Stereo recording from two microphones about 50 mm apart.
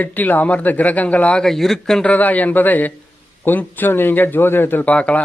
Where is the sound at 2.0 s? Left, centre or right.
Left.